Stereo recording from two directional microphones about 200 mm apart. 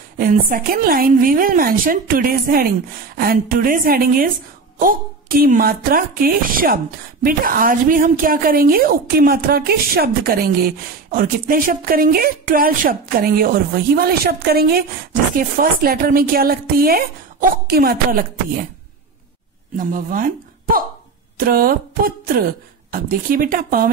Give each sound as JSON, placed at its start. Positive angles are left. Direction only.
{"t": 0.2, "sound": "a woman's voice", "side_deg": -45}
{"t": 19.8, "sound": "a woman's voice", "side_deg": -45}